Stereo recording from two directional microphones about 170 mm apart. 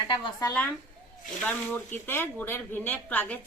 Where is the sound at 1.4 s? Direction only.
10° left (ahead or behind).